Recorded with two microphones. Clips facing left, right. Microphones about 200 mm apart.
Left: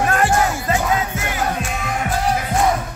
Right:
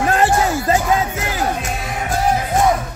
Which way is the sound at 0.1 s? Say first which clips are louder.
Right 2 dB; 30° right (ahead or behind).